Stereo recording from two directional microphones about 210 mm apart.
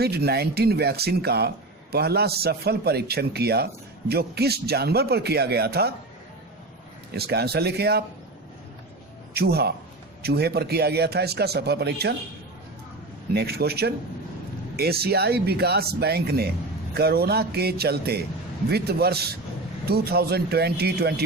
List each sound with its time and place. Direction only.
0.0 s speech: 50° right (ahead or behind)
7.1 s speech: 50° right (ahead or behind)
9.3 s speech: 50° right (ahead or behind)
13.3 s speech: 50° right (ahead or behind)